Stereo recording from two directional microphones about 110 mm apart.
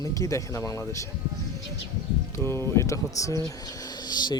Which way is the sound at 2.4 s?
20° left (ahead or behind).